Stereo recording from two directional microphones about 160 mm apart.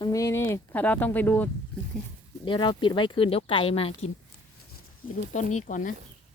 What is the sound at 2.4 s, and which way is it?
Speech, 30° left (ahead or behind).